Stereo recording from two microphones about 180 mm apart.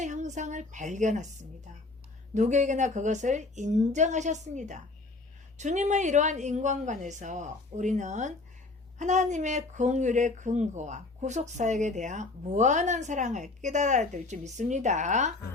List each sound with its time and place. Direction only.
0.0 s a woman's voice: 40° right (ahead or behind)